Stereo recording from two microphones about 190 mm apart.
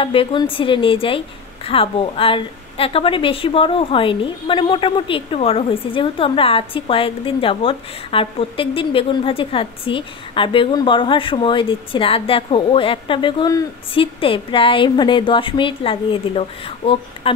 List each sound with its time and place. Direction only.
0.0 s a woman's voice: 30° left (ahead or behind)